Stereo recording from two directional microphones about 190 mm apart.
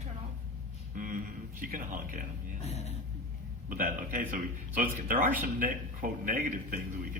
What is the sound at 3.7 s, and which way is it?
A man's voice, 45° right (ahead or behind).